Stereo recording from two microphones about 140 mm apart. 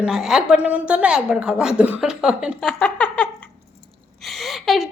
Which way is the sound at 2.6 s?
5° left (ahead or behind).